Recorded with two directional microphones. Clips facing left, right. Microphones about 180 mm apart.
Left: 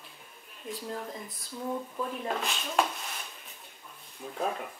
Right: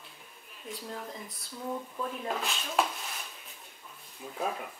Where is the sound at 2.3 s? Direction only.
Centre (ahead or behind).